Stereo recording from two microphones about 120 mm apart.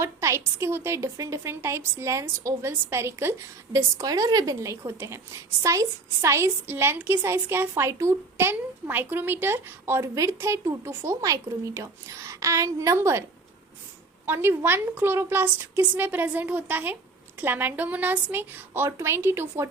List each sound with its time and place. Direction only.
0.0 s a woman's voice: 25° right (ahead or behind)
14.3 s a woman's voice: 20° right (ahead or behind)